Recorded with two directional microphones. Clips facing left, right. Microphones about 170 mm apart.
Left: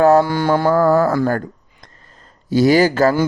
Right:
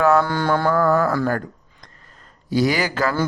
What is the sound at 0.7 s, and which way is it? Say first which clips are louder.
Speech: left 5 dB; 35° left (ahead or behind).